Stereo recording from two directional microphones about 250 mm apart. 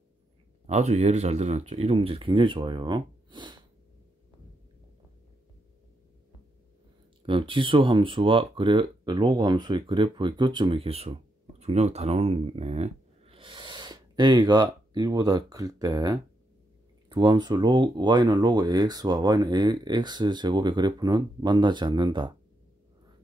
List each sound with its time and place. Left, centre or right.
0.7 s speech: right
7.2 s speech: centre